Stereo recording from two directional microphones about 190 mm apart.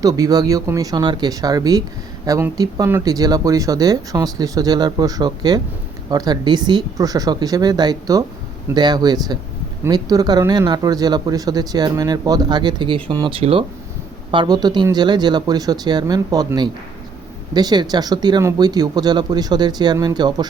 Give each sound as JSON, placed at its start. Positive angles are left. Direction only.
{"t": 0.0, "sound": "speech", "side_deg": -20}